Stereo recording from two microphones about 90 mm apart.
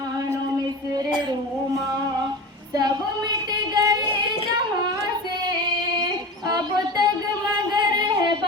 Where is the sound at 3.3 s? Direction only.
50° right (ahead or behind).